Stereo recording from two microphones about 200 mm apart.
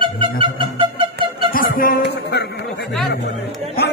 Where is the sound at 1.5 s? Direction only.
45° left (ahead or behind).